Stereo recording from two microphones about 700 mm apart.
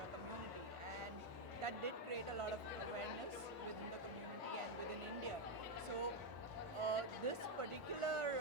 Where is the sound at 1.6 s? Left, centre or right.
Right.